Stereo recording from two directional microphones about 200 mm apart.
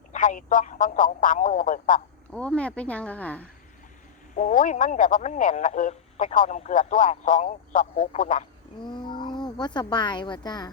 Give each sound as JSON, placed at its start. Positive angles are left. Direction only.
{"t": 0.1, "sound": "speech", "side_deg": 40}
{"t": 2.3, "sound": "speech", "side_deg": 5}
{"t": 4.4, "sound": "speech", "side_deg": 40}
{"t": 8.9, "sound": "speech", "side_deg": 20}